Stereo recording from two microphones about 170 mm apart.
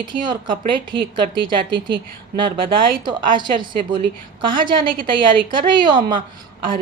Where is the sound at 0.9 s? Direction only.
30° right (ahead or behind).